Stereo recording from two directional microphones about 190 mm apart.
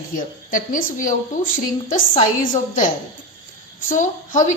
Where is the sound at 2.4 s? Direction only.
45° left (ahead or behind).